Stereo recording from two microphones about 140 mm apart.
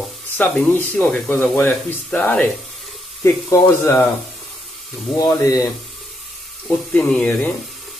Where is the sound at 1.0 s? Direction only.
5° left (ahead or behind).